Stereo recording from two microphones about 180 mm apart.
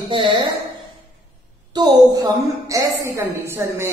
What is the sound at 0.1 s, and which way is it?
Speech, 30° right (ahead or behind).